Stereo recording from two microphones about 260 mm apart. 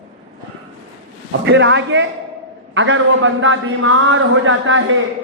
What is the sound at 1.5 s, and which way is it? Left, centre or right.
A man's voice, right.